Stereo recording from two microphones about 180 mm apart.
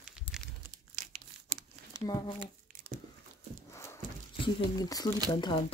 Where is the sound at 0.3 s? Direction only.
30° left (ahead or behind).